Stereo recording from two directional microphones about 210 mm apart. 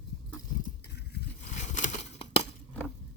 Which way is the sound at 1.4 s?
35° left (ahead or behind).